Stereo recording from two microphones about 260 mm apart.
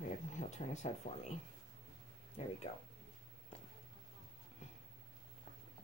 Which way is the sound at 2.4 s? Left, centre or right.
Left.